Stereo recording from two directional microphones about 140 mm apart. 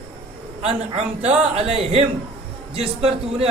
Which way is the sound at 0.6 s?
50° right (ahead or behind).